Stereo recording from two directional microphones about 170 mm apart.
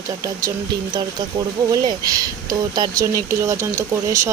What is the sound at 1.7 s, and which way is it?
Speech, 20° right (ahead or behind).